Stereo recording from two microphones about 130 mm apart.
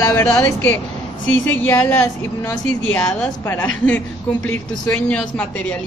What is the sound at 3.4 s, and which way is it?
Speech, 20° left (ahead or behind).